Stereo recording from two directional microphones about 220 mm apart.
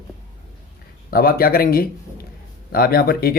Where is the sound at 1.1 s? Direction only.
40° left (ahead or behind).